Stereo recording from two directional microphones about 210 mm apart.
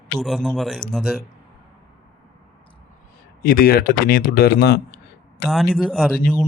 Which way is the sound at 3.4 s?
45° left (ahead or behind).